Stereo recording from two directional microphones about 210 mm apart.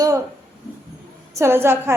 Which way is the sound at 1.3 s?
10° right (ahead or behind).